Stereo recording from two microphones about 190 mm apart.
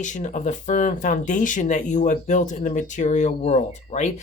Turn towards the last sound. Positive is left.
turn(degrees=35)  # may be behind; listen again after turning